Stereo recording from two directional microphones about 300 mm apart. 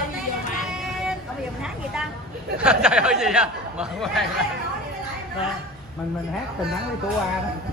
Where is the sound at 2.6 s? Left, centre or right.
Centre.